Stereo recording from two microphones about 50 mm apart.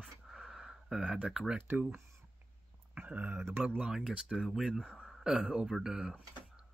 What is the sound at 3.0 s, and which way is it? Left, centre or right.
Speech, right.